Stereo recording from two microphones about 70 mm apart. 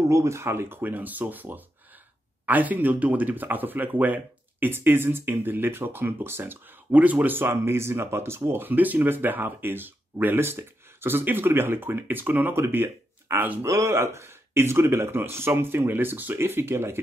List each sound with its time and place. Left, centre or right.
0.1 s speech: right
13.7 s speech: right